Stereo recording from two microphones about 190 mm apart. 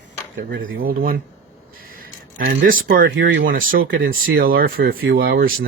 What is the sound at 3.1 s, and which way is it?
Speech, 75° right (ahead or behind).